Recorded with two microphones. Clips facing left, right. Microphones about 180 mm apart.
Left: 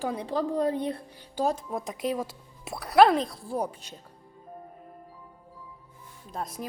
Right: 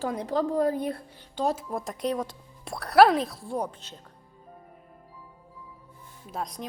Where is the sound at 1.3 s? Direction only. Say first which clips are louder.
Even; centre (ahead or behind).